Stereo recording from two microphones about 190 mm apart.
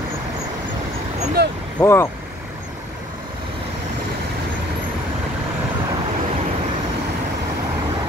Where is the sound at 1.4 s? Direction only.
60° right (ahead or behind).